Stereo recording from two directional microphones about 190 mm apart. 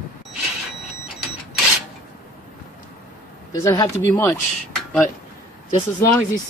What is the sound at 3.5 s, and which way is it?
Speech, 15° left (ahead or behind).